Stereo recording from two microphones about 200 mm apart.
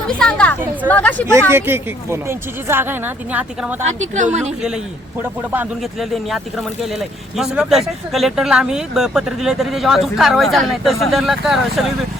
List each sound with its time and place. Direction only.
0.1 s a woman's voice: 5° left (ahead or behind)
1.3 s speech: 10° right (ahead or behind)
4.1 s speech: 35° right (ahead or behind)
5.5 s speech: 5° right (ahead or behind)